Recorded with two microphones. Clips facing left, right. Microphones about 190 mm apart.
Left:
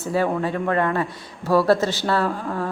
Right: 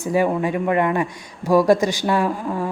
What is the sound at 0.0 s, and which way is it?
A woman's voice, 15° right (ahead or behind).